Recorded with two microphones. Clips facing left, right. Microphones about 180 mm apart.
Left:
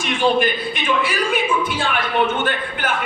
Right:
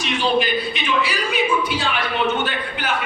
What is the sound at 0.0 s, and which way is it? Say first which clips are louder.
Speech: left 2 dB; 50° left (ahead or behind).